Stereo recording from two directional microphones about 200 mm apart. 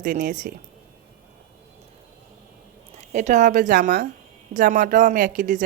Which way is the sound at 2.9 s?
35° right (ahead or behind).